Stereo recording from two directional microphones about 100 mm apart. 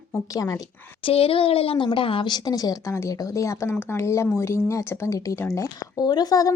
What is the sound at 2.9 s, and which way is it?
Speech, 30° left (ahead or behind).